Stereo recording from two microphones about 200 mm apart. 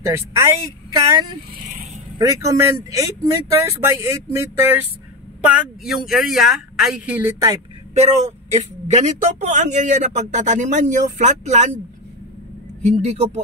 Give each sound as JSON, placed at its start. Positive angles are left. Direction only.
{"t": 0.0, "sound": "speech", "side_deg": -15}
{"t": 1.5, "sound": "vehicle", "side_deg": -40}
{"t": 2.1, "sound": "speech", "side_deg": -15}
{"t": 7.9, "sound": "speech", "side_deg": -35}
{"t": 12.8, "sound": "speech", "side_deg": -35}